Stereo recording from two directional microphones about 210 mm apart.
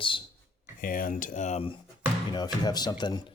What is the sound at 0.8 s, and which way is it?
Speech, 40° left (ahead or behind).